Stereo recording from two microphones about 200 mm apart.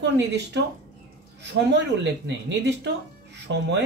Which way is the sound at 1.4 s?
60° right (ahead or behind).